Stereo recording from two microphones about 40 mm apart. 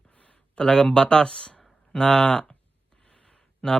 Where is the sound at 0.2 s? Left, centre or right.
Left.